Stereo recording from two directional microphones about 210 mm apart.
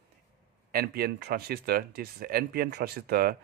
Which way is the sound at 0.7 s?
45° right (ahead or behind).